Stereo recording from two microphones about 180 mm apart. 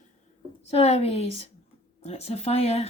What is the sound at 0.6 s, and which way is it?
Speech, 35° left (ahead or behind).